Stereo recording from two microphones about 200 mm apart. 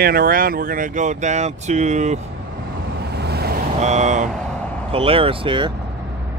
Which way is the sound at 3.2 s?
55° right (ahead or behind).